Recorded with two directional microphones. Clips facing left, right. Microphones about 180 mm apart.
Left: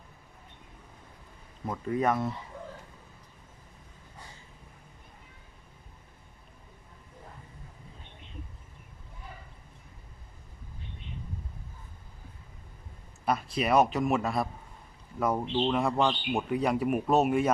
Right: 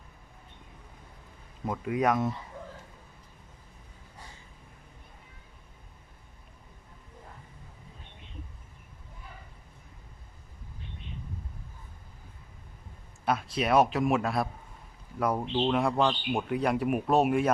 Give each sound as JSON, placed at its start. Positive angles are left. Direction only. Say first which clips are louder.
{"t": 1.6, "sound": "speech", "louder": "right 1 dB", "side_deg": -10}
{"t": 13.2, "sound": "speech", "louder": "even", "side_deg": 0}